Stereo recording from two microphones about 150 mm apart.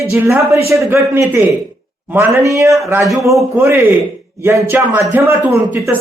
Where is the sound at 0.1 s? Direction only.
20° right (ahead or behind).